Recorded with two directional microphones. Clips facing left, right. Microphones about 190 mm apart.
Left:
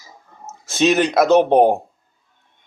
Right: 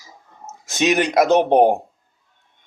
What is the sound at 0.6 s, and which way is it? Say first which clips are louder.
Speech: left 2 dB; 15° right (ahead or behind).